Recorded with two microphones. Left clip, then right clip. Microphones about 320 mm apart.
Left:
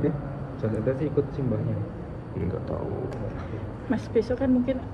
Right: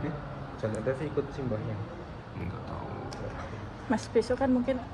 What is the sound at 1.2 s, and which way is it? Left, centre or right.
Speech, right.